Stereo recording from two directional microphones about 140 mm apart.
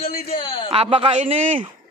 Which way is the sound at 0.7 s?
45° right (ahead or behind).